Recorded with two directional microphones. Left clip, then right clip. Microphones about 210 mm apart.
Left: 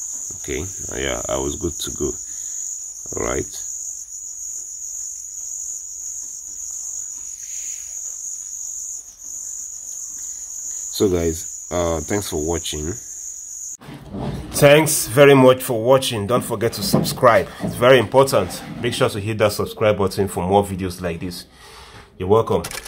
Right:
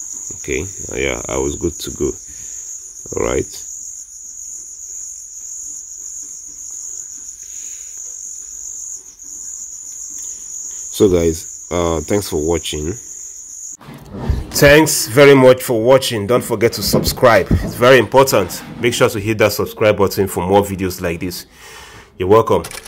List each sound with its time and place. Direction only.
0.5 s speech: 15° right (ahead or behind)
3.1 s cricket: 20° right (ahead or behind)
11.0 s cricket: 20° right (ahead or behind)
14.5 s speech: 10° right (ahead or behind)